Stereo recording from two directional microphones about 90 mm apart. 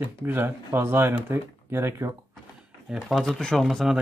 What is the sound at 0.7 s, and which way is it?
Speech, 25° right (ahead or behind).